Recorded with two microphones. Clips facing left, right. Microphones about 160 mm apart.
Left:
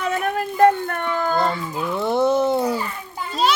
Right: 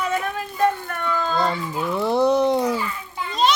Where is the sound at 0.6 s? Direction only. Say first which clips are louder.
Left 5 dB; 60° left (ahead or behind).